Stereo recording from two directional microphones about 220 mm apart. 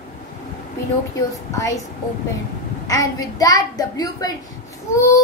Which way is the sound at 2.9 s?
15° left (ahead or behind).